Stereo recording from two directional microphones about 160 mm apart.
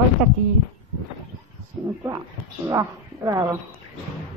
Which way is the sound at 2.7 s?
20° right (ahead or behind).